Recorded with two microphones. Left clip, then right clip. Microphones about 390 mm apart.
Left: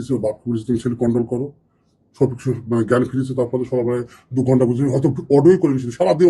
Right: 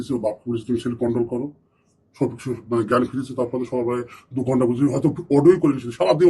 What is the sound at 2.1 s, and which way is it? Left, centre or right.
Speech, left.